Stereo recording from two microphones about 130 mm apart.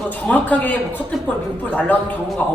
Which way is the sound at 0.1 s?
10° left (ahead or behind).